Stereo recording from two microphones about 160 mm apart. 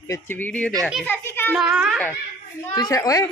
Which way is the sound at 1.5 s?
5° right (ahead or behind).